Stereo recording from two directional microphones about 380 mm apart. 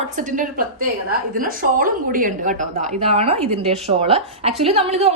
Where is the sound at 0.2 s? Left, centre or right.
Right.